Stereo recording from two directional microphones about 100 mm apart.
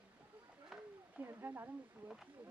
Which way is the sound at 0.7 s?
5° right (ahead or behind).